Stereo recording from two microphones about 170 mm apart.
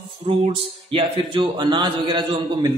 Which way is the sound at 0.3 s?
35° right (ahead or behind).